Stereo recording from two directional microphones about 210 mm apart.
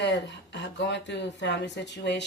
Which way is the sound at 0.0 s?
55° left (ahead or behind).